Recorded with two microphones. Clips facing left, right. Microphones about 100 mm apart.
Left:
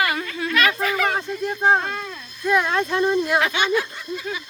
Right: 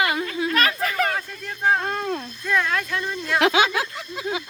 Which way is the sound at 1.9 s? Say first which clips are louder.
Right 4 dB; 45° right (ahead or behind).